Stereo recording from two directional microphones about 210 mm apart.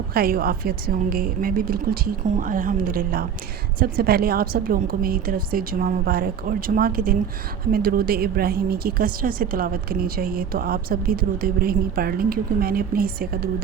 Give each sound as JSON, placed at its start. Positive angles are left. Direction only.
{"t": 0.1, "sound": "a woman's voice", "side_deg": -45}